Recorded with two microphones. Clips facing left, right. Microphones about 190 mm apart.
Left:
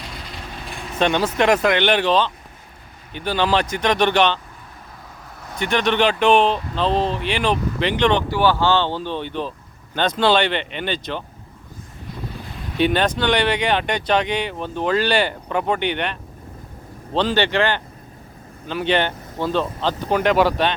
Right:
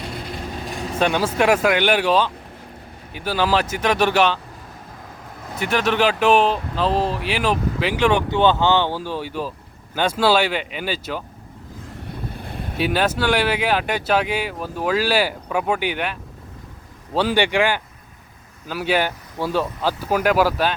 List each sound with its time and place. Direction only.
0.7 s vehicle: 40° right (ahead or behind)
0.9 s speech: 5° right (ahead or behind)
5.5 s speech: 5° right (ahead or behind)
8.3 s speech: 20° right (ahead or behind)
12.4 s boat: 55° right (ahead or behind)
12.7 s speech: 5° right (ahead or behind)
17.2 s speech: 10° right (ahead or behind)